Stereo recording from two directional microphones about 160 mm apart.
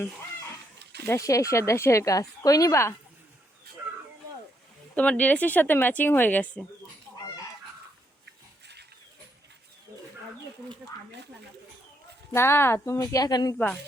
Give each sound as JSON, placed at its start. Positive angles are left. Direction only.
{"t": 1.0, "sound": "speech", "side_deg": 20}
{"t": 4.9, "sound": "speech", "side_deg": 10}
{"t": 12.3, "sound": "speech", "side_deg": 15}